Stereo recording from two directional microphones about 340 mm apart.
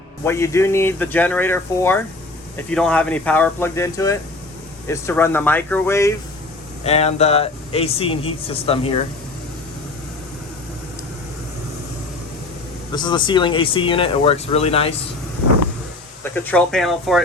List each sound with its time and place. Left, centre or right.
0.3 s speech: centre
6.8 s speech: centre
12.9 s speech: centre
16.3 s speech: centre